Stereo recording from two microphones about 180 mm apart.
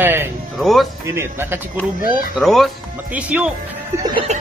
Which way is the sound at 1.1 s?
15° right (ahead or behind).